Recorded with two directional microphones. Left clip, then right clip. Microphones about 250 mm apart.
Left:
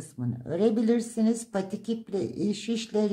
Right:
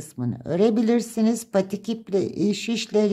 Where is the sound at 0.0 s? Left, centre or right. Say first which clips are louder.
Right 5 dB; right.